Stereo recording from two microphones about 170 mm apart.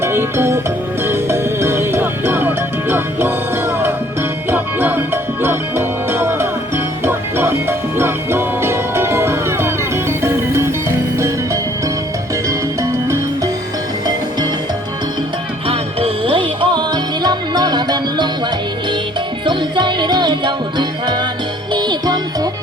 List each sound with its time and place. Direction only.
0.0 s music: 15° right (ahead or behind)
12.5 s music: 20° right (ahead or behind)
15.6 s music: 35° right (ahead or behind)
19.5 s music: 25° right (ahead or behind)